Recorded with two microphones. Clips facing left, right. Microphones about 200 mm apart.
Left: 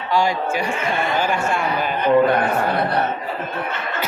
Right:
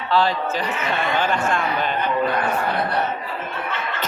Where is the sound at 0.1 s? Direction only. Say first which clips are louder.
Left 1 dB; 15° left (ahead or behind).